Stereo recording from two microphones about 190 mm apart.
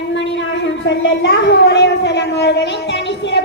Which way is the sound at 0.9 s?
65° left (ahead or behind).